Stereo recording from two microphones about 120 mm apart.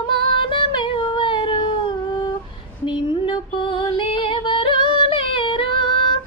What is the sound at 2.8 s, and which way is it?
Female singing, 40° left (ahead or behind).